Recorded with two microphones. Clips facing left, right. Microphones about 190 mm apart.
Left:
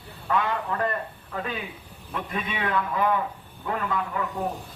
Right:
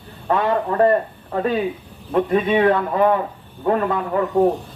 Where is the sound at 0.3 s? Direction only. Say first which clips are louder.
Right 7 dB; 40° right (ahead or behind).